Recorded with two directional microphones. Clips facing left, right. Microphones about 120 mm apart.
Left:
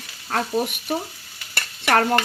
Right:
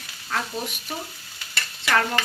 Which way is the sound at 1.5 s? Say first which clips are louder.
Left 4 dB; 50° left (ahead or behind).